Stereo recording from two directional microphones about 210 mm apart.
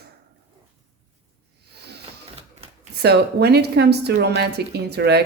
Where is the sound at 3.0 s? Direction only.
50° right (ahead or behind).